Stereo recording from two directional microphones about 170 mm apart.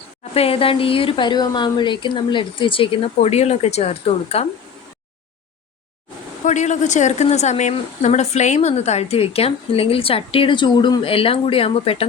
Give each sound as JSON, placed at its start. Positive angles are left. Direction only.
{"t": 0.3, "sound": "a woman's voice", "side_deg": 35}
{"t": 6.4, "sound": "a woman's voice", "side_deg": 45}